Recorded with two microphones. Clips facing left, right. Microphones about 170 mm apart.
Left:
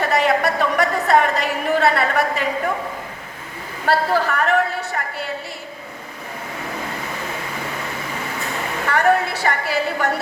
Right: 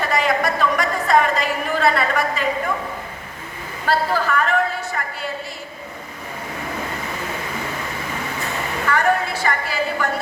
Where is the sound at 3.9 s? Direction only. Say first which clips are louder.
Left 2 dB; 65° left (ahead or behind).